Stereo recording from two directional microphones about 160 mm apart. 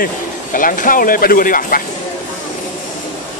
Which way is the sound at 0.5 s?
60° left (ahead or behind).